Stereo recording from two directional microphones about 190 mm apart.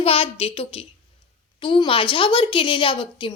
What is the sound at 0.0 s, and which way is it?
A woman's voice, 30° left (ahead or behind).